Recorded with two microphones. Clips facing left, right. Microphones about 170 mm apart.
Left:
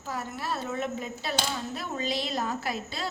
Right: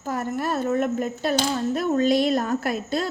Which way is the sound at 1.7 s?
50° right (ahead or behind).